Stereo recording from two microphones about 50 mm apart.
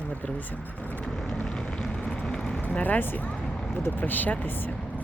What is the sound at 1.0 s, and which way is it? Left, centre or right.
Vehicle, centre.